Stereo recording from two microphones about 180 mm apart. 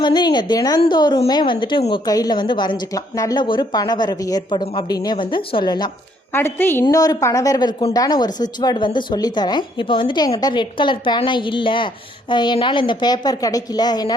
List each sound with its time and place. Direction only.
0.0 s a woman's voice: 25° left (ahead or behind)
6.3 s a woman's voice: 10° left (ahead or behind)